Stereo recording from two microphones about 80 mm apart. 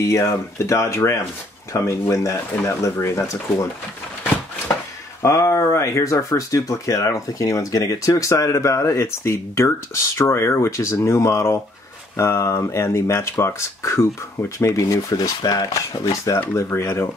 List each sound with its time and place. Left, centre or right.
0.0 s speech: left
5.2 s speech: left